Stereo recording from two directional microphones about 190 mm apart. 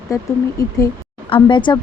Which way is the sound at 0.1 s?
15° left (ahead or behind).